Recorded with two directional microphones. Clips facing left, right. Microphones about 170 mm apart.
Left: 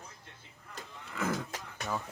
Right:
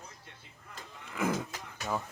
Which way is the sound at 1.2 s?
15° right (ahead or behind).